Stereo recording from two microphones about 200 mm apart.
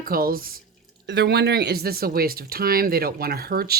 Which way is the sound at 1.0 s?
55° right (ahead or behind).